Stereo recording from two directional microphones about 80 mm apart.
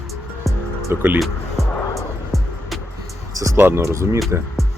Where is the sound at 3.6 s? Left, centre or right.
Right.